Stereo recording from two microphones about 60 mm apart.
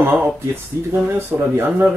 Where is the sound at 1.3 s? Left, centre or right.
Right.